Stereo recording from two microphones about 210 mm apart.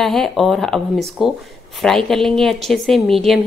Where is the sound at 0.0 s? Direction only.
Centre (ahead or behind).